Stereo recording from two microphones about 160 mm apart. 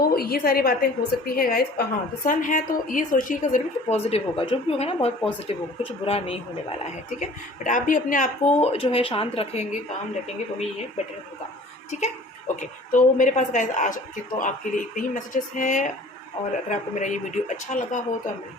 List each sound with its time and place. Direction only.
0.2 s a woman's voice: 70° left (ahead or behind); by 6.7 s 40° left (ahead or behind)
7.2 s speech: 50° left (ahead or behind)
11.9 s a woman's voice: 45° left (ahead or behind)